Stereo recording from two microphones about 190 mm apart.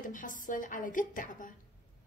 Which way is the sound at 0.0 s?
45° left (ahead or behind).